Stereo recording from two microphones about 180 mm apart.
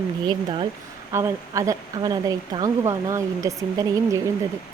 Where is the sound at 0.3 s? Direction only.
25° right (ahead or behind).